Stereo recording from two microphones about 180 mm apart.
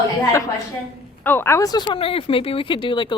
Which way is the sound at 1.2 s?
10° left (ahead or behind).